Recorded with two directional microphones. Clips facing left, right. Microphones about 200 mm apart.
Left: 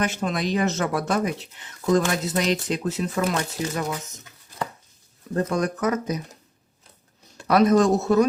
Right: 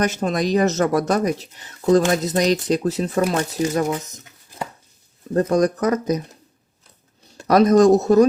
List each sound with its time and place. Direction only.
0.0 s speech: 40° right (ahead or behind)
5.3 s speech: 35° right (ahead or behind)
7.3 s speech: 40° right (ahead or behind)